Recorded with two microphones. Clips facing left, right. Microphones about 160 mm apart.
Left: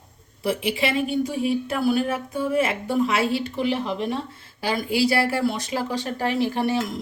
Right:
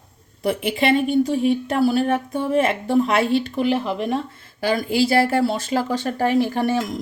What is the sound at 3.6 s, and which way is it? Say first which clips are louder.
A woman's voice: right 3 dB; 50° right (ahead or behind).